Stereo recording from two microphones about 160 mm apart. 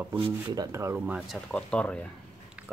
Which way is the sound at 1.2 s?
Centre (ahead or behind).